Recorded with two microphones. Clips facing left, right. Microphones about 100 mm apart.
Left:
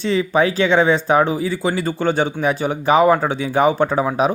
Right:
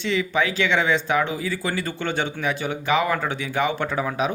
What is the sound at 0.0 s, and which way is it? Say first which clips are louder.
Speech: left 6 dB; 35° left (ahead or behind).